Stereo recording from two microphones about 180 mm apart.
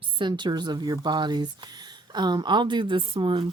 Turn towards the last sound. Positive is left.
turn(degrees=-25)  # may be behind; listen again after turning